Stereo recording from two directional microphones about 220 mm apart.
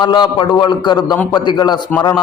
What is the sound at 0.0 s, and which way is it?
A man's voice, 20° left (ahead or behind).